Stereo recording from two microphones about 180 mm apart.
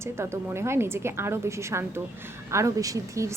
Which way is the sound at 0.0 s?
15° right (ahead or behind).